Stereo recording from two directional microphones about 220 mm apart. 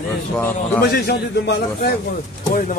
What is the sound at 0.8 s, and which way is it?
A man's voice, 45° left (ahead or behind).